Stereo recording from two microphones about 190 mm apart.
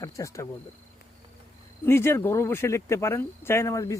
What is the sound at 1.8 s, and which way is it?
Speech, 10° left (ahead or behind).